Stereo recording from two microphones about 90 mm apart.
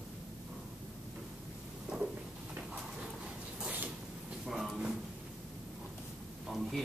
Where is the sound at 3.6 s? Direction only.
20° right (ahead or behind).